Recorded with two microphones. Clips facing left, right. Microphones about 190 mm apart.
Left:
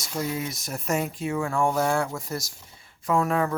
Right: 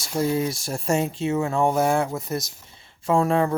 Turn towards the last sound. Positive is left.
turn(degrees=-30)  # may be behind; listen again after turning